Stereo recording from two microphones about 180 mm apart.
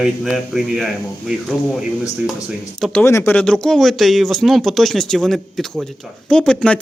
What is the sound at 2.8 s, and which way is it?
Speech, 5° left (ahead or behind).